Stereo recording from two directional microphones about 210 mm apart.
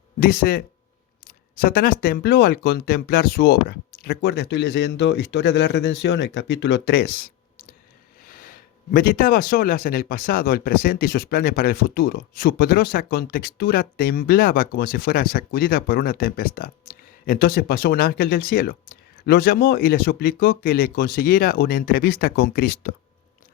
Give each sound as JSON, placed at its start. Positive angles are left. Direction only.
{"t": 0.2, "sound": "speech", "side_deg": 45}
{"t": 8.3, "sound": "speech", "side_deg": 40}